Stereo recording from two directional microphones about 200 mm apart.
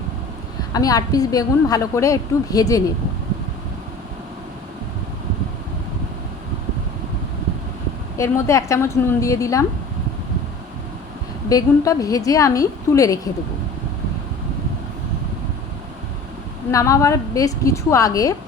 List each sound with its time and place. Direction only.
0.7 s a woman's voice: 20° left (ahead or behind)
8.2 s a woman's voice: 15° left (ahead or behind)
11.4 s a woman's voice: 15° left (ahead or behind)
16.7 s a woman's voice: 15° left (ahead or behind)